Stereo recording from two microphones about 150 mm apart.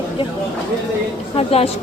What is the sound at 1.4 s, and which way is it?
Speech, 40° left (ahead or behind).